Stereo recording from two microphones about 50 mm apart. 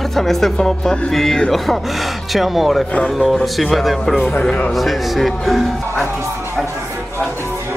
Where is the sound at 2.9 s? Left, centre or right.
Left.